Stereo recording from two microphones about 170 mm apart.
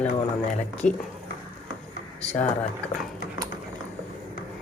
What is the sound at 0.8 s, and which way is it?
Speech, 50° left (ahead or behind).